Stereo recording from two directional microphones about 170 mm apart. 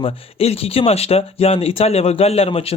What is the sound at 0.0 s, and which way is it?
Speech, 35° left (ahead or behind).